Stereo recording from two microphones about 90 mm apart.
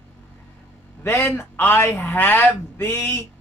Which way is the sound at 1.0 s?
30° left (ahead or behind).